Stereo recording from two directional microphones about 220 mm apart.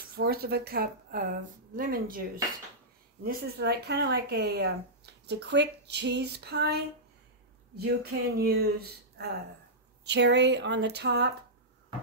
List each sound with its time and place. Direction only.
0.0 s speech: 45° right (ahead or behind)
3.3 s speech: 45° right (ahead or behind)